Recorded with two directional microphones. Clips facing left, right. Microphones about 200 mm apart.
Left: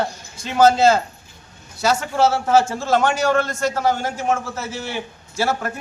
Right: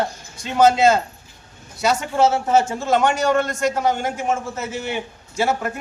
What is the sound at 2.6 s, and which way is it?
A man's voice, 20° right (ahead or behind).